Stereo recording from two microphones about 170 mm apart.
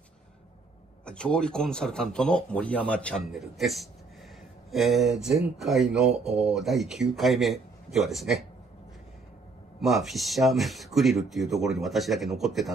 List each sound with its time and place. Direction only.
1.0 s speech: 5° left (ahead or behind)
9.8 s speech: centre (ahead or behind)